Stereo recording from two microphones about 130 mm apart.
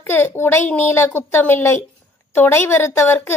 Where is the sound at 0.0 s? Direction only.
20° left (ahead or behind).